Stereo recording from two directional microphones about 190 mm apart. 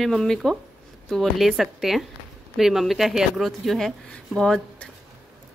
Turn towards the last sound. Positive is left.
turn(degrees=5)  # may be behind; listen again after turning